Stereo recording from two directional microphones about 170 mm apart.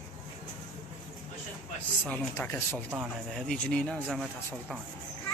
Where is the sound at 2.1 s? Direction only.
15° left (ahead or behind).